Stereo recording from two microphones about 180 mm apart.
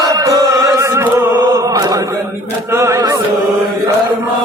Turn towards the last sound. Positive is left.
turn(degrees=-15)  # may be behind; listen again after turning